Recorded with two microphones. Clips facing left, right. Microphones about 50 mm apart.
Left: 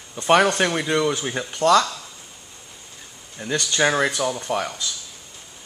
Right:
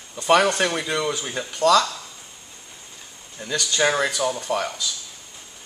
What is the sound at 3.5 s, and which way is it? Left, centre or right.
Speech, left.